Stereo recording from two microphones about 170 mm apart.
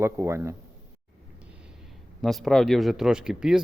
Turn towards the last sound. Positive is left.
turn(degrees=-5)  # may be behind; listen again after turning